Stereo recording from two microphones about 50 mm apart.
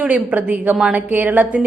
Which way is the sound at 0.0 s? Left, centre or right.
Right.